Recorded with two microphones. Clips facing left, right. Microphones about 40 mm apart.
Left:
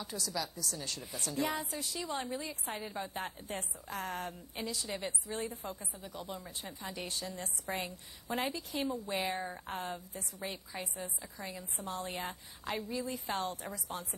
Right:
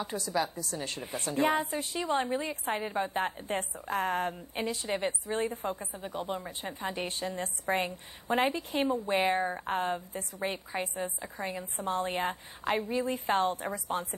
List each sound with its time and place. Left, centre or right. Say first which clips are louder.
0.0 s a woman's voice: right 7 dB; right